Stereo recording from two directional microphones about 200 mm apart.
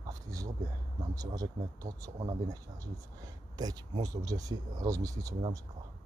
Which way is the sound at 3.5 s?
20° right (ahead or behind).